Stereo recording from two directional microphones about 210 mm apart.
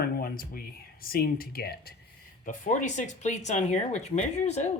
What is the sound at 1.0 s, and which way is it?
Speech, 45° left (ahead or behind).